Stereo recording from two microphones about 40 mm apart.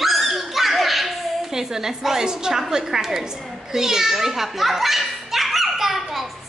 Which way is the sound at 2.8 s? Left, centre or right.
Centre.